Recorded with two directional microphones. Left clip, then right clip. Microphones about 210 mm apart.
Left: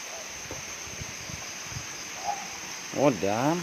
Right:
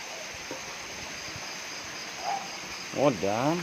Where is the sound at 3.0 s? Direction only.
25° left (ahead or behind).